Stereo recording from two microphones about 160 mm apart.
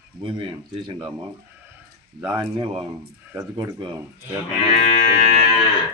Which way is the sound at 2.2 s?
25° right (ahead or behind).